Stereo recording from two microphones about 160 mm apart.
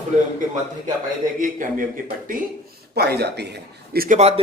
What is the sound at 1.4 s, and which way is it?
A man's voice, 60° right (ahead or behind).